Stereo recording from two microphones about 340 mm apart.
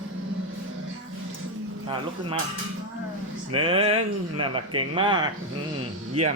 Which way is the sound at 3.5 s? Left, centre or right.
Centre.